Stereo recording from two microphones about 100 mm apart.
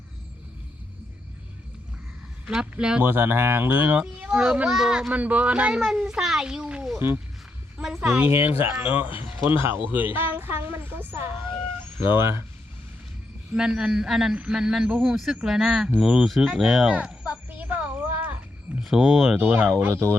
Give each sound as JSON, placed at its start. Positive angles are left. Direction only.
{"t": 2.5, "sound": "a child's voice", "side_deg": -10}
{"t": 3.0, "sound": "a child's voice", "side_deg": -20}
{"t": 8.2, "sound": "speech", "side_deg": -20}
{"t": 13.5, "sound": "a child's voice", "side_deg": -5}
{"t": 16.4, "sound": "a sound", "side_deg": -10}
{"t": 18.8, "sound": "speech", "side_deg": -5}
{"t": 19.4, "sound": "speech", "side_deg": -20}